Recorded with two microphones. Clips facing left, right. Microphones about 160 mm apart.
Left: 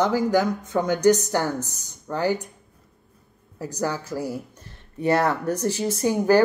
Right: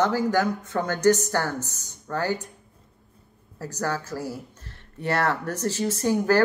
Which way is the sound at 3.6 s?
15° left (ahead or behind).